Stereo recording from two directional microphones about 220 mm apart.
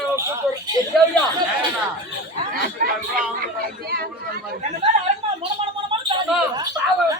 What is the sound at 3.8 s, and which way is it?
Speech, 45° right (ahead or behind).